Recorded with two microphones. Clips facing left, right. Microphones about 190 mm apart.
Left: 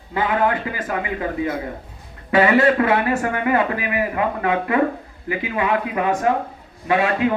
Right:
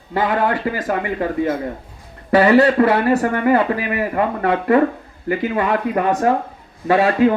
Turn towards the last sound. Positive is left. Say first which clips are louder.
# right 4 dB
turn(degrees=-40)  # may be behind; listen again after turning